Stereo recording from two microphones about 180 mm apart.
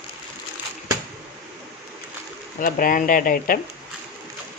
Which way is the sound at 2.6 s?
50° left (ahead or behind).